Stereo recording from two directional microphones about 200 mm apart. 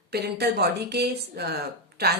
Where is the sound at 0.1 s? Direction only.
55° right (ahead or behind).